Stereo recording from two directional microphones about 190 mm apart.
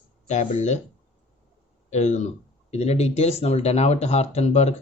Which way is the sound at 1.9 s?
35° left (ahead or behind).